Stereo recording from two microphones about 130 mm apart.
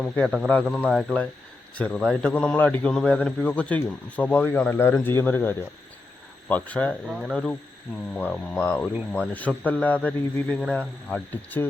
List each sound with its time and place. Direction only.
0.2 s speech: centre (ahead or behind)
0.4 s a man's voice: 10° left (ahead or behind)
7.1 s speech: 5° right (ahead or behind)
8.1 s a man's voice: 10° left (ahead or behind)